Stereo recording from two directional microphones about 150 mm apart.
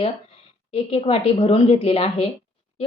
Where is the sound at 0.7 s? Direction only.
40° left (ahead or behind).